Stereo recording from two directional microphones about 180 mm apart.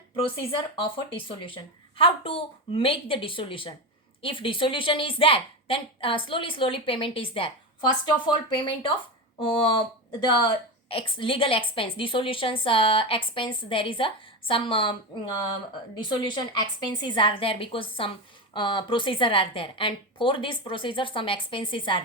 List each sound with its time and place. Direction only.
1.4 s a woman's voice: 30° left (ahead or behind)